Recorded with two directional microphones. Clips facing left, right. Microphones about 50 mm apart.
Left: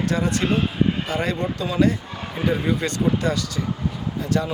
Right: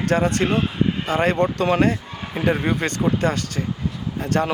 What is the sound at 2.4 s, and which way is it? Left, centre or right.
Speech, right.